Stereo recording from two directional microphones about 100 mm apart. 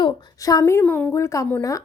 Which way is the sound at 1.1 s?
30° left (ahead or behind).